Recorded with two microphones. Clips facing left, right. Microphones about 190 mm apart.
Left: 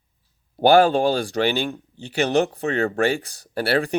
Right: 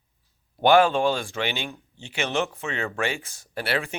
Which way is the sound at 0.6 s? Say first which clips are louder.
Left 3 dB; 35° left (ahead or behind).